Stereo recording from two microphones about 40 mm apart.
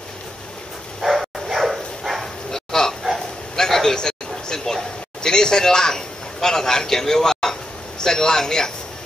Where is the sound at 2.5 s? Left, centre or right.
Centre.